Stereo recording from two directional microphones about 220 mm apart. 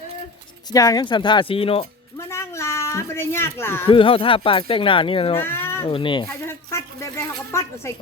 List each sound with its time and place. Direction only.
0.7 s speech: 15° left (ahead or behind)
2.1 s a sound: 10° left (ahead or behind)
3.8 s speech: 25° left (ahead or behind)
5.4 s speech: 10° left (ahead or behind)
5.9 s speech: 20° left (ahead or behind)
7.5 s speech: 10° left (ahead or behind)